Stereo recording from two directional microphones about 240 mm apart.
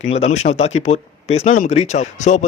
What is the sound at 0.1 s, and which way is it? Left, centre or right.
A man's voice, left.